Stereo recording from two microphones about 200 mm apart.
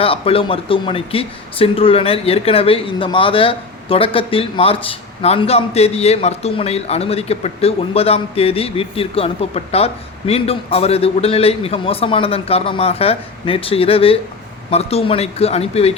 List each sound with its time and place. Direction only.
0.0 s speech: 30° left (ahead or behind)